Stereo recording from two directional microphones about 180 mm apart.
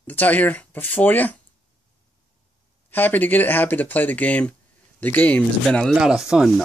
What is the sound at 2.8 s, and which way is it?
Speech, 10° left (ahead or behind).